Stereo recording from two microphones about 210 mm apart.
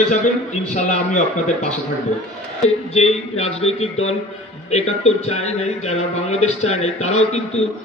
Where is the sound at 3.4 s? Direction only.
30° left (ahead or behind).